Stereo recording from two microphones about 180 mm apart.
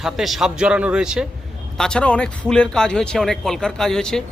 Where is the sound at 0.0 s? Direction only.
Centre (ahead or behind).